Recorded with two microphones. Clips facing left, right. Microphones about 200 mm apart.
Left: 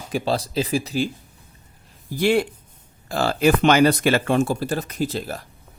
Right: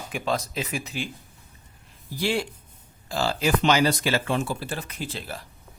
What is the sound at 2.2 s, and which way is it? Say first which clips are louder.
Speech: left 7 dB; 55° left (ahead or behind).